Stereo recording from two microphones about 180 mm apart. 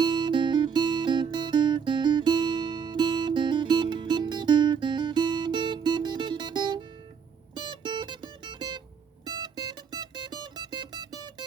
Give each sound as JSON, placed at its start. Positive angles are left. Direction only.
{"t": 0.0, "sound": "guitar", "side_deg": -25}
{"t": 7.5, "sound": "music", "side_deg": -25}